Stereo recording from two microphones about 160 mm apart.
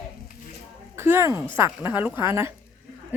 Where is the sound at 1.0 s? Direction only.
15° right (ahead or behind).